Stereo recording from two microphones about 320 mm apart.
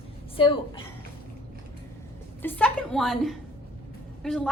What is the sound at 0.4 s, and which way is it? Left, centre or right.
Speech, centre.